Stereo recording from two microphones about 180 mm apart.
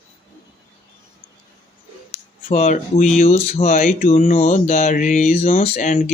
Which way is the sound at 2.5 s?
40° left (ahead or behind).